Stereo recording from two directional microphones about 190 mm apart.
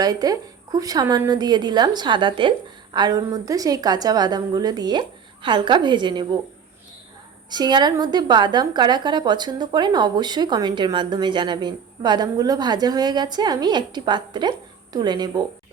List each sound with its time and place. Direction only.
0.0 s a woman's voice: 20° right (ahead or behind)
7.5 s a woman's voice: 20° right (ahead or behind)